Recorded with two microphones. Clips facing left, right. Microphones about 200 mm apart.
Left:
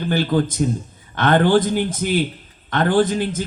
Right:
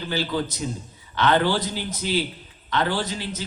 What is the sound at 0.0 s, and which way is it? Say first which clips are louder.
A man's voice: left 7 dB; 55° left (ahead or behind).